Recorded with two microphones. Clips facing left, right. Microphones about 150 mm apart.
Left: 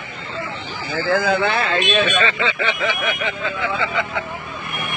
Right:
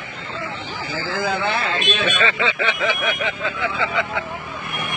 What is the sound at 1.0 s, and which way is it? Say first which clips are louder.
Speech: left 5 dB; 65° left (ahead or behind).